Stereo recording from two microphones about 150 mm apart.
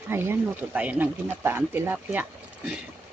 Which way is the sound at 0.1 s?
15° right (ahead or behind).